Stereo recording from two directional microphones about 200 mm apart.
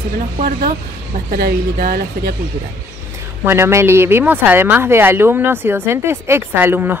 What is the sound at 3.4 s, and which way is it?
Speech, 10° right (ahead or behind).